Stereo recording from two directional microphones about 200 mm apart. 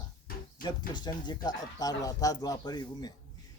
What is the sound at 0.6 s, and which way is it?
Speech, 20° left (ahead or behind).